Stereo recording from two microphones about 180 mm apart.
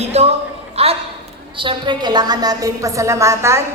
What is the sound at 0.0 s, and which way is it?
Speech, 35° right (ahead or behind).